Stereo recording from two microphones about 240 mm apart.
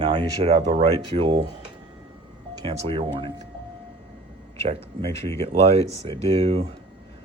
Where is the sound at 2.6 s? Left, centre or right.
Right.